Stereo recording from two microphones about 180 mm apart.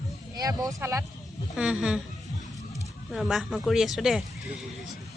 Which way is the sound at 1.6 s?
5° right (ahead or behind).